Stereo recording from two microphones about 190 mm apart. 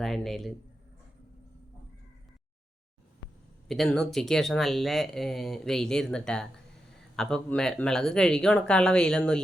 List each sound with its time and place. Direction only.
0.0 s speech: centre (ahead or behind)
3.7 s speech: centre (ahead or behind)